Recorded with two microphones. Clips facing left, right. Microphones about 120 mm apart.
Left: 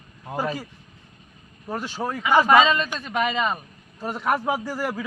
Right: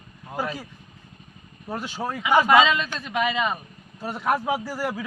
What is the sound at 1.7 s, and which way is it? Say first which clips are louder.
A man's voice: left 1 dB; 10° right (ahead or behind).